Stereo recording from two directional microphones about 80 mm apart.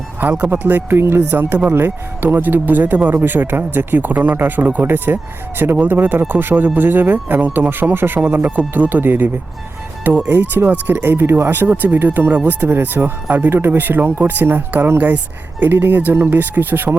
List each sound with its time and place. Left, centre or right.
0.2 s speech: right